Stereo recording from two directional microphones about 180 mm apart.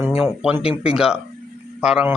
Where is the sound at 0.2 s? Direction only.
Centre (ahead or behind).